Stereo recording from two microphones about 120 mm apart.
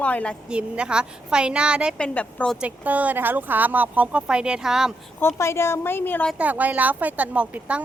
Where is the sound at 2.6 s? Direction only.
15° right (ahead or behind).